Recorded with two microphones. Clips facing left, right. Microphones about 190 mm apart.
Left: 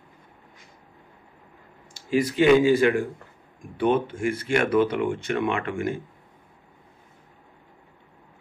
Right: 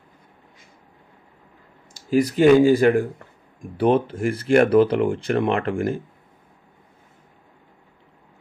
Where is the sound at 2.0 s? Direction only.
40° right (ahead or behind).